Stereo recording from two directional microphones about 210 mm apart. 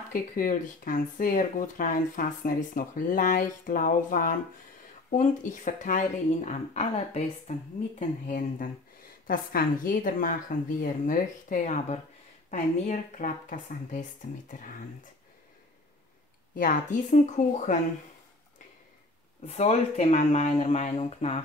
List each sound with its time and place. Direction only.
0.1 s speech: 40° left (ahead or behind)
16.5 s speech: 35° left (ahead or behind)
19.4 s speech: 30° left (ahead or behind)